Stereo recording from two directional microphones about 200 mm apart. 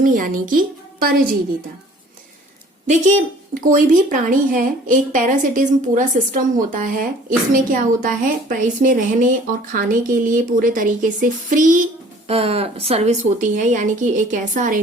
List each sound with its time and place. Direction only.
0.0 s a woman's voice: 45° right (ahead or behind)
3.5 s a woman's voice: 45° right (ahead or behind)